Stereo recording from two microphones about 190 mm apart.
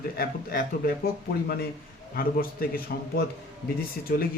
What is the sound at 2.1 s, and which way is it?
Speech, 50° left (ahead or behind).